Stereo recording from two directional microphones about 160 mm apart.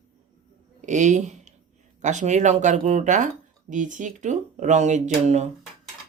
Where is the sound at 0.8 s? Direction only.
50° right (ahead or behind).